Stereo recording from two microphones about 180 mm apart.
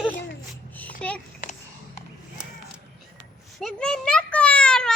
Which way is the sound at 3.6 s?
5° left (ahead or behind).